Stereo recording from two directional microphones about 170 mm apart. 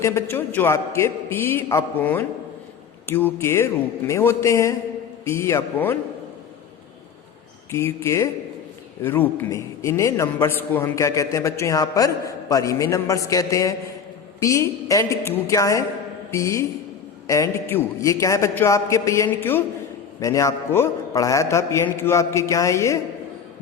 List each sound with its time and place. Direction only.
0.0 s a man's voice: 15° left (ahead or behind)
7.7 s a man's voice: 15° left (ahead or behind)